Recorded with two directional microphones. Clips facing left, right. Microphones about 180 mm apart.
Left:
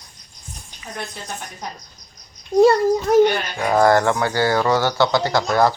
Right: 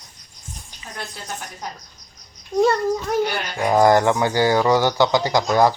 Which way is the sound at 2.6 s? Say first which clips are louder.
Left 5 dB; 35° left (ahead or behind).